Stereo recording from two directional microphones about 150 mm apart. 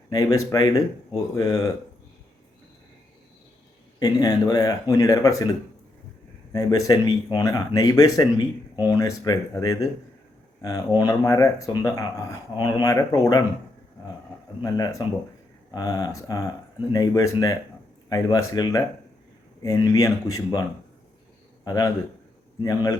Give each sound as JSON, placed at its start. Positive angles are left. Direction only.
{"t": 0.1, "sound": "speech", "side_deg": 25}
{"t": 4.0, "sound": "speech", "side_deg": 25}
{"t": 14.6, "sound": "a man's voice", "side_deg": 25}